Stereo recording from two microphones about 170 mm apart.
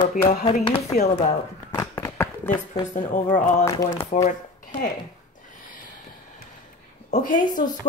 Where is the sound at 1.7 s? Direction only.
20° left (ahead or behind).